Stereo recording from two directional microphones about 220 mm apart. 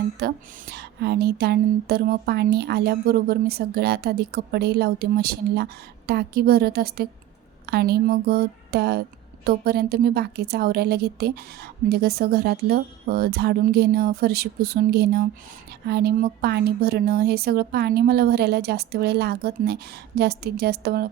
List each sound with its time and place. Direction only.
0.2 s speech: 45° right (ahead or behind)